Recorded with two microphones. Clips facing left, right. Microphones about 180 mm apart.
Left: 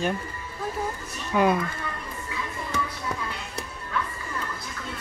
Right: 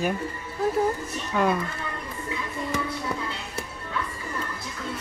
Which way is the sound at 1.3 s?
5° left (ahead or behind).